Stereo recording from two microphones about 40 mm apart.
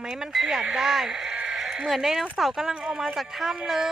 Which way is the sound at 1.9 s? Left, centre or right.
Centre.